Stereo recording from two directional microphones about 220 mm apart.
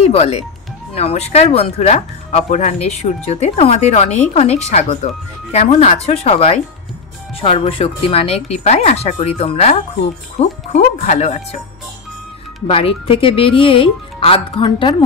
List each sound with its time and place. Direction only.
0.0 s speech: 30° left (ahead or behind)
12.6 s speech: 25° left (ahead or behind)